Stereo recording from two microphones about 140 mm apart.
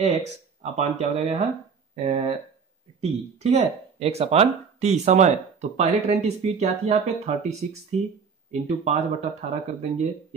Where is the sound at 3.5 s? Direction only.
45° right (ahead or behind).